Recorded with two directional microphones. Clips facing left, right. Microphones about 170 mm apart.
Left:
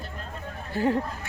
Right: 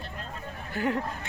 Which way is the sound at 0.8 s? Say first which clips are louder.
Left 4 dB; 30° left (ahead or behind).